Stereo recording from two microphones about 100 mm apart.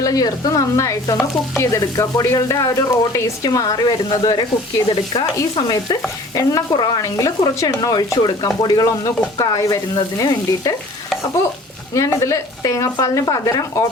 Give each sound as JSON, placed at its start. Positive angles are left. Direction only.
{"t": 0.0, "sound": "stir", "side_deg": 35}
{"t": 4.1, "sound": "speech", "side_deg": 50}
{"t": 4.9, "sound": "stir", "side_deg": 55}
{"t": 5.5, "sound": "speech", "side_deg": 45}
{"t": 7.0, "sound": "stir", "side_deg": 35}
{"t": 11.9, "sound": "stir", "side_deg": 30}